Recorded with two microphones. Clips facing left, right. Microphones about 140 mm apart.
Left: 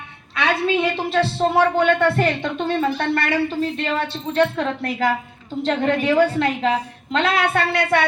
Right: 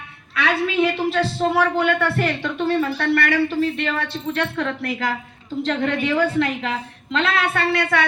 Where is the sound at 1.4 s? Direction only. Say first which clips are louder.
Left 3 dB; 30° left (ahead or behind).